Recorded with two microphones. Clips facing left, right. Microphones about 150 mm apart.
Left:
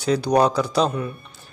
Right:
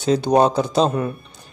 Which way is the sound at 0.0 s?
25° right (ahead or behind).